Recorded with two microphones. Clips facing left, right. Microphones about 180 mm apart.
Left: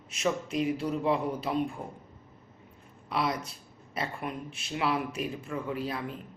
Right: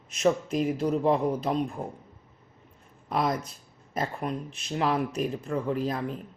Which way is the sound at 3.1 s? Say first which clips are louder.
Right 3 dB; 45° right (ahead or behind).